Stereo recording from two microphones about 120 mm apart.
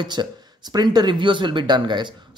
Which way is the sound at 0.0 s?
40° right (ahead or behind).